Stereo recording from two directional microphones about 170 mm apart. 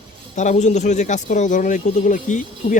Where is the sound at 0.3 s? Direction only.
45° left (ahead or behind).